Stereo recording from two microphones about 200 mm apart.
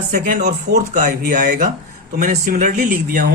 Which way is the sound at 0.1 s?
50° right (ahead or behind).